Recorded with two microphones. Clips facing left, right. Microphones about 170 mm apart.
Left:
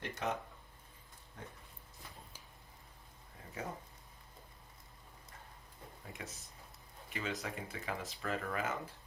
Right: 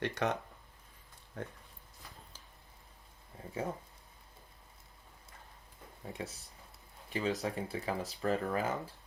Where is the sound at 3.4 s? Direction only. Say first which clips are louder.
Right 7 dB; 30° right (ahead or behind).